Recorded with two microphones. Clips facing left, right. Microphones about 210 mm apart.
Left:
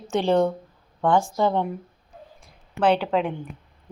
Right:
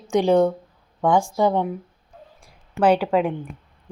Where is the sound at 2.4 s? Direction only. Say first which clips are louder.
Right 3 dB; 10° right (ahead or behind).